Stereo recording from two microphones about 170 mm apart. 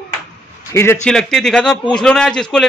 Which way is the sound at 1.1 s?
Centre (ahead or behind).